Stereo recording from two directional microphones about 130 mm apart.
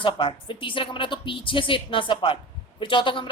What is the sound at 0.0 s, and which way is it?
A woman's voice, 40° left (ahead or behind).